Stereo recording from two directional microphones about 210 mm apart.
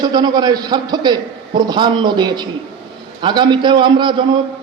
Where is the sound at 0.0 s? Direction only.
20° right (ahead or behind).